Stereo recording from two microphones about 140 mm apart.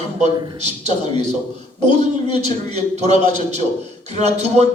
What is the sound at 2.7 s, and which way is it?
A man's voice, 55° right (ahead or behind).